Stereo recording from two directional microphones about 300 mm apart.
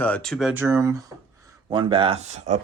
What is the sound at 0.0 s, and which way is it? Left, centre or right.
Speech, centre.